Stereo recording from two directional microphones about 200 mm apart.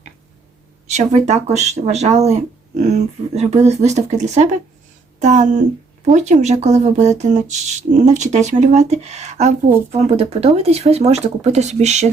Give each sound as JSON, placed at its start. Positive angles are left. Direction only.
{"t": 0.9, "sound": "speech", "side_deg": -35}